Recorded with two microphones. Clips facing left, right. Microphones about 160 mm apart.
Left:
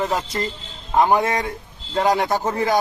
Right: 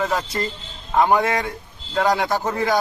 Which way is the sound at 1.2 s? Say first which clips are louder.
Even; 25° left (ahead or behind).